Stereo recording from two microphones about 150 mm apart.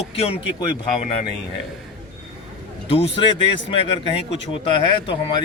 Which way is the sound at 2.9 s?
35° left (ahead or behind).